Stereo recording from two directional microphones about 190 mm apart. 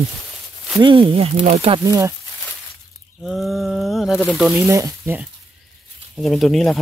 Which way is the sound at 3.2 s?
Centre (ahead or behind).